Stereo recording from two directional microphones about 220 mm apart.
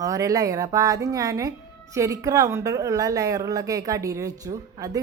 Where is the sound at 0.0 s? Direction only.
15° right (ahead or behind).